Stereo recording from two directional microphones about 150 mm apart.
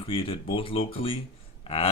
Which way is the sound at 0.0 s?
40° left (ahead or behind).